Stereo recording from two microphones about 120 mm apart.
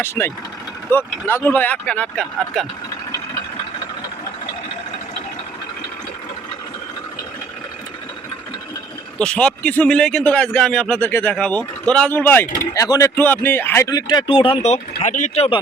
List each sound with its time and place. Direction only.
0.0 s a man's voice: 20° left (ahead or behind)
9.1 s a man's voice: 10° left (ahead or behind)
12.7 s speech: 30° left (ahead or behind)
13.1 s a man's voice: 15° left (ahead or behind)
13.9 s speech: 35° left (ahead or behind); by 15.4 s 85° left